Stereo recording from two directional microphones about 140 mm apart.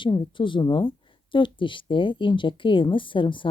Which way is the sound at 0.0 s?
35° left (ahead or behind).